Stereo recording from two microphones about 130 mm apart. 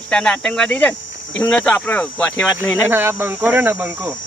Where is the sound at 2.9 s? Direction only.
15° right (ahead or behind).